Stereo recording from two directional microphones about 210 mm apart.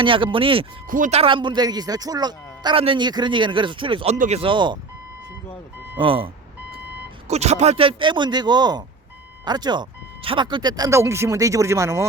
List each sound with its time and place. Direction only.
0.0 s speech: 25° right (ahead or behind)
0.9 s speech: 40° right (ahead or behind); by 4.8 s 20° right (ahead or behind)
6.0 s speech: 25° right (ahead or behind)